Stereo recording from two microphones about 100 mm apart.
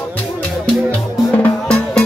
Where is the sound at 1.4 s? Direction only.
15° left (ahead or behind).